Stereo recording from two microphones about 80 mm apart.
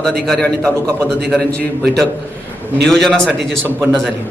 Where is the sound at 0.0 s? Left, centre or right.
Centre.